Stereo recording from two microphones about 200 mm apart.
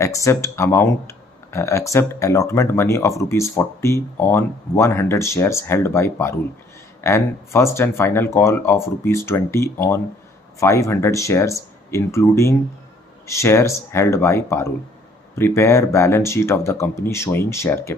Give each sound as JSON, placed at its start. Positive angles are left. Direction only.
{"t": 0.0, "sound": "speech", "side_deg": 15}